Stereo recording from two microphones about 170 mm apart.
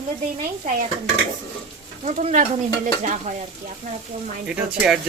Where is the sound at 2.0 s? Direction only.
45° right (ahead or behind).